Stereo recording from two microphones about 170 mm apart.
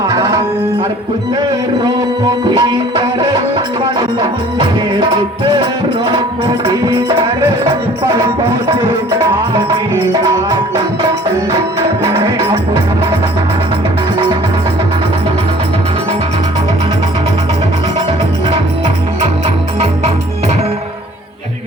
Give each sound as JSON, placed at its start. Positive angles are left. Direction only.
{"t": 0.1, "sound": "music", "side_deg": -20}
{"t": 2.6, "sound": "music", "side_deg": -25}
{"t": 6.1, "sound": "music", "side_deg": -25}
{"t": 8.0, "sound": "music", "side_deg": -15}